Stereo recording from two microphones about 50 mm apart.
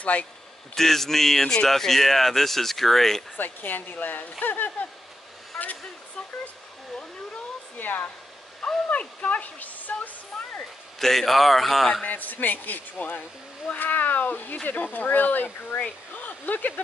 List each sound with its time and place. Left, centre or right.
0.0 s speech: left
0.7 s speech: centre
3.3 s speech: left
7.8 s speech: left
8.6 s speech: left
10.3 s a man's voice: centre
12.1 s speech: left